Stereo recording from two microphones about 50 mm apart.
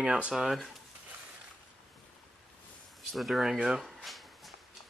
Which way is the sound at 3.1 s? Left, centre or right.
Centre.